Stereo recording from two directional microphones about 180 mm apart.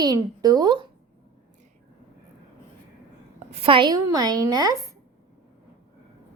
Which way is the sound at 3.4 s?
35° right (ahead or behind).